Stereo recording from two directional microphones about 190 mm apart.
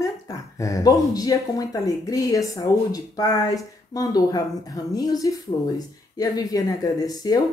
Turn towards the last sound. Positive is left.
turn(degrees=20)  # may be behind; listen again after turning